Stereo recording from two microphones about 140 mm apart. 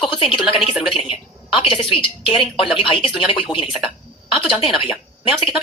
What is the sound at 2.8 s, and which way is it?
A woman's voice, 40° left (ahead or behind).